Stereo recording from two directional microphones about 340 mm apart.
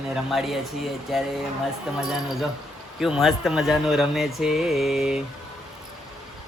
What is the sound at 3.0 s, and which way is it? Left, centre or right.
Speech, centre.